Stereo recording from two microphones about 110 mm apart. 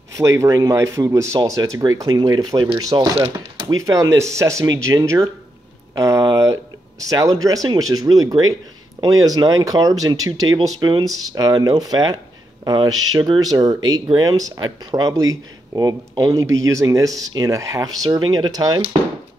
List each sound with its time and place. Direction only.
0.2 s speech: 30° right (ahead or behind)